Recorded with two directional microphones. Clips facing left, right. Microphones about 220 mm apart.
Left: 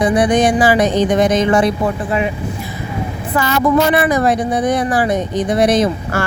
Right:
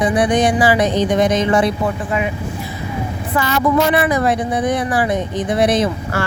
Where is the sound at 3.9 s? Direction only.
45° left (ahead or behind).